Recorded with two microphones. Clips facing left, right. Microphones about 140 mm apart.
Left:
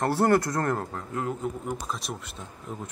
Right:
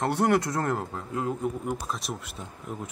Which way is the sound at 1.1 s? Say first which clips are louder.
Right 1 dB; 20° right (ahead or behind).